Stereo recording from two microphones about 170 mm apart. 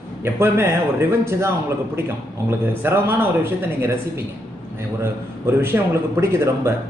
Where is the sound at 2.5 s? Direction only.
15° right (ahead or behind).